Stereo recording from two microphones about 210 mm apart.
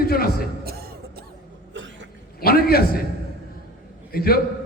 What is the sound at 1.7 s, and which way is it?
Cough, 60° right (ahead or behind).